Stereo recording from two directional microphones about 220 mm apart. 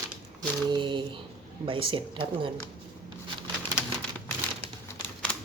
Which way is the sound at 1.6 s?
25° right (ahead or behind).